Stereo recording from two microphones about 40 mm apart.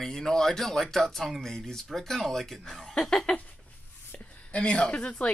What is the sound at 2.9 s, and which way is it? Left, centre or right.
Speech, left.